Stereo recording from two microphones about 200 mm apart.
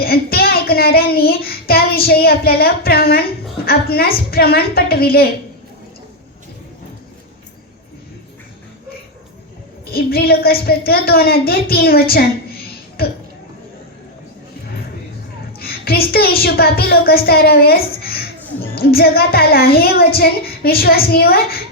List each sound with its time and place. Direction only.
0.0 s a child's voice: 50° left (ahead or behind)
9.9 s a woman's voice: 50° left (ahead or behind)
15.5 s a child's voice: 50° left (ahead or behind)